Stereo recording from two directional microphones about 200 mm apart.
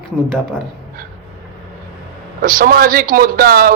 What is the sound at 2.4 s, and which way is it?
Speech, 45° right (ahead or behind).